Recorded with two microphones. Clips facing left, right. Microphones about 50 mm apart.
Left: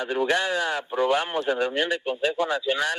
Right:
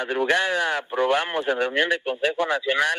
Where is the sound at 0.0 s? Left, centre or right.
Right.